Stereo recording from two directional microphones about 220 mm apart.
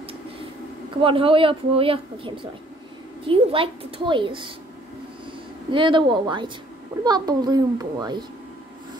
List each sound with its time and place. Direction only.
1.0 s a woman's voice: 25° right (ahead or behind)
5.7 s a woman's voice: 20° right (ahead or behind)